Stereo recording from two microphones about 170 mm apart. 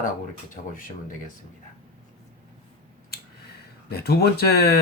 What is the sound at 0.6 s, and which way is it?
Speech, 55° left (ahead or behind).